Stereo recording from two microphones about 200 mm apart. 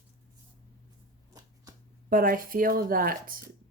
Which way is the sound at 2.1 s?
45° right (ahead or behind).